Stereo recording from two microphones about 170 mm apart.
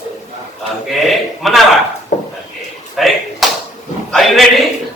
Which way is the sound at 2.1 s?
45° left (ahead or behind).